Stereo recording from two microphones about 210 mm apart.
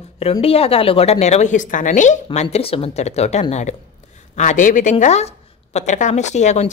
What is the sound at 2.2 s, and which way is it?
A woman's voice, 25° left (ahead or behind).